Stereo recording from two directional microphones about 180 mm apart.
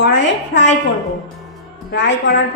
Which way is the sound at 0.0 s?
75° left (ahead or behind).